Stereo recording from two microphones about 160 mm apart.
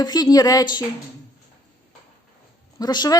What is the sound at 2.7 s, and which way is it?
Speech, 25° left (ahead or behind).